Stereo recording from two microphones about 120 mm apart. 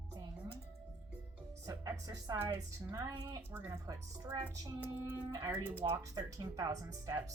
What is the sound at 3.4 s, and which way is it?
Speech, 20° right (ahead or behind).